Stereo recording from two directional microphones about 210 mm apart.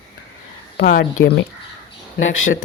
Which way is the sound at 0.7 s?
50° left (ahead or behind).